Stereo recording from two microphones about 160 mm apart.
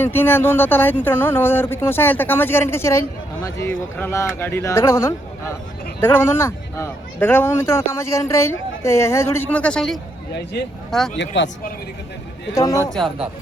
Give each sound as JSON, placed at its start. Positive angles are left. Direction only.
{"t": 0.0, "sound": "speech", "side_deg": 15}
{"t": 12.5, "sound": "speech", "side_deg": 20}
{"t": 12.9, "sound": "speech", "side_deg": 0}